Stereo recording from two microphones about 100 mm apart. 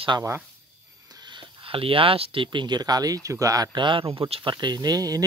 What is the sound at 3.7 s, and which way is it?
Speech, 55° right (ahead or behind).